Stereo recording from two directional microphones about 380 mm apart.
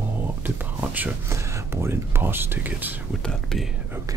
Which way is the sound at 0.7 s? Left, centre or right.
Centre.